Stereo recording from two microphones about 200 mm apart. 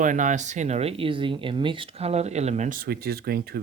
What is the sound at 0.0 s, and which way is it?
Speech, 40° right (ahead or behind).